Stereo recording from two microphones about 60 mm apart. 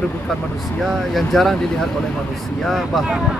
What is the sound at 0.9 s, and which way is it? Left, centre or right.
Speech, centre.